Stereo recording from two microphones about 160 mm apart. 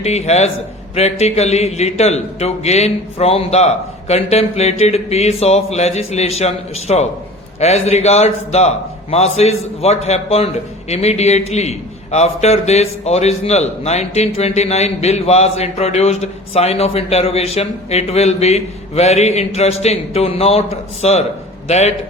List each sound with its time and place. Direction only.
0.0 s a man's voice: 45° left (ahead or behind)